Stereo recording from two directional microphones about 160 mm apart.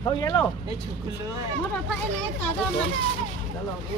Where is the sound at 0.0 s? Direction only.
25° left (ahead or behind).